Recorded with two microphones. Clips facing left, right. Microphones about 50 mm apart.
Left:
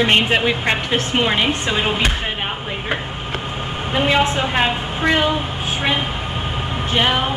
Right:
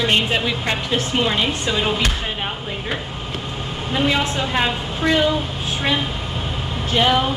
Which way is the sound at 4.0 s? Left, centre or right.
Left.